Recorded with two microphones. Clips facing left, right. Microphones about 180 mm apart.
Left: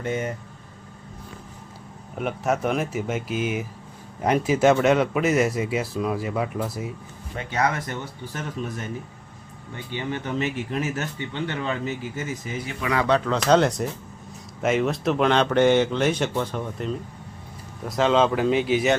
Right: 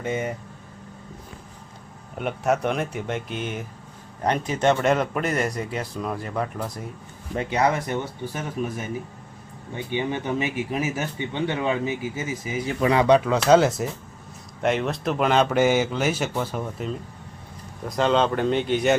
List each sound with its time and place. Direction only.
0.0 s speech: 10° right (ahead or behind)
2.1 s speech: centre (ahead or behind)
7.5 s speech: 15° right (ahead or behind)
12.6 s speech: 35° right (ahead or behind)
13.0 s speech: 15° right (ahead or behind); by 18.9 s 5° left (ahead or behind)